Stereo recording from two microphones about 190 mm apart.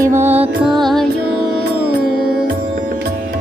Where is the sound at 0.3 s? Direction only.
5° right (ahead or behind).